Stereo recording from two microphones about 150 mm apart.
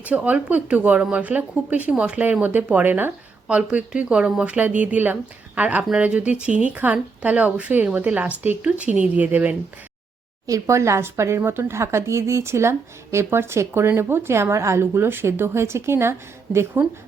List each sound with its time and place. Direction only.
0.0 s speech: 10° right (ahead or behind)
10.4 s speech: 20° right (ahead or behind)